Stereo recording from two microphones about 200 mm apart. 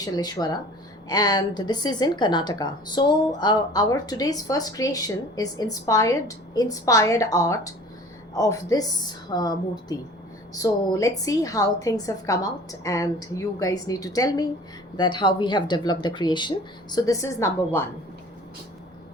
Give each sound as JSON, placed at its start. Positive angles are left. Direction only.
{"t": 0.0, "sound": "a woman's voice", "side_deg": 20}